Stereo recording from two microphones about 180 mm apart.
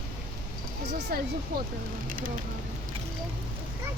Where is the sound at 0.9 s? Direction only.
55° right (ahead or behind).